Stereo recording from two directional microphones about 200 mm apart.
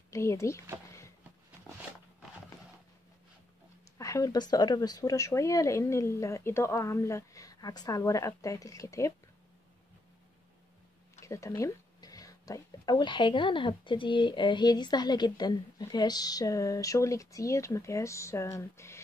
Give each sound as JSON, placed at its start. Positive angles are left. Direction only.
{"t": 0.1, "sound": "speech", "side_deg": 15}
{"t": 4.0, "sound": "speech", "side_deg": 15}
{"t": 11.1, "sound": "speech", "side_deg": 15}